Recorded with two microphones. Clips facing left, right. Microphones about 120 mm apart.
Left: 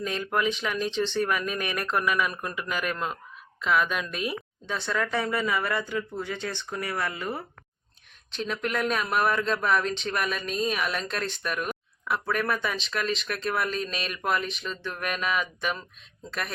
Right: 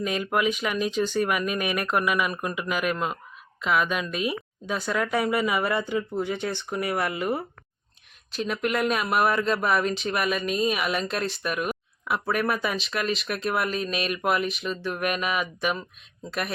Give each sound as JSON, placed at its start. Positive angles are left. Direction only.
{"t": 0.0, "sound": "a woman's voice", "side_deg": -10}